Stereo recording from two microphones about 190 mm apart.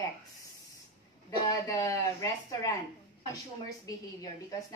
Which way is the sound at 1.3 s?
15° left (ahead or behind).